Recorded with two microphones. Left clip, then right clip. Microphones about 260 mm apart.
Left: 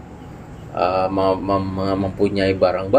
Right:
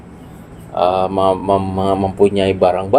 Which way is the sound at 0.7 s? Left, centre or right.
Right.